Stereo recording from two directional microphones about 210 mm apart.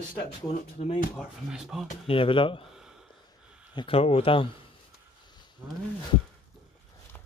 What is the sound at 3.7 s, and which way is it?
Speech, 25° left (ahead or behind).